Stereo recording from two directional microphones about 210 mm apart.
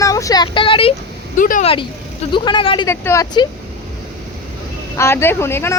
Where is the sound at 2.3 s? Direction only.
20° left (ahead or behind).